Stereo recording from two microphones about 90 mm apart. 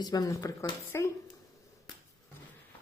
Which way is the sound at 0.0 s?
45° left (ahead or behind).